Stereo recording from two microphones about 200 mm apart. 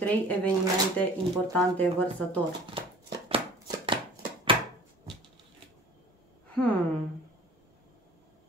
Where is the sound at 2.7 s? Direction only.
25° right (ahead or behind).